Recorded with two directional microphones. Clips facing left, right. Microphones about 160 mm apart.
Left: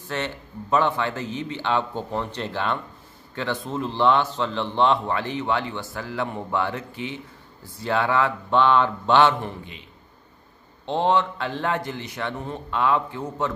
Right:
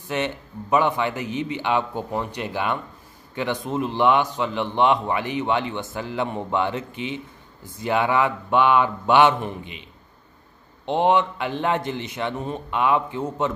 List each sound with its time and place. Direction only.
0.0 s a man's voice: 15° right (ahead or behind)
10.9 s a man's voice: 15° right (ahead or behind)